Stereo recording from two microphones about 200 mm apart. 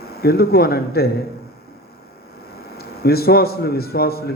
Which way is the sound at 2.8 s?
50° left (ahead or behind).